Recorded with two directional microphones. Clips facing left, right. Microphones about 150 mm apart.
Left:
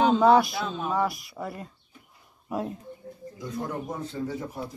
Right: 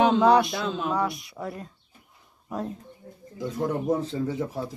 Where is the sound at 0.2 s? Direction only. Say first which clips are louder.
Even; centre (ahead or behind).